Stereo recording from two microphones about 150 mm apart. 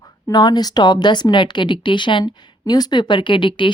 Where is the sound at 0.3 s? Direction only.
25° left (ahead or behind).